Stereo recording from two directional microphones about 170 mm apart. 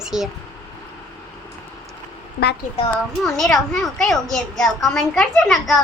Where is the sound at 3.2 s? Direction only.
Centre (ahead or behind).